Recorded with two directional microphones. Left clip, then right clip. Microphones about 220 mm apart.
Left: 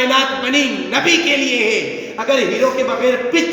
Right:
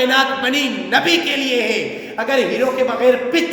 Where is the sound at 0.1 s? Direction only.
15° right (ahead or behind).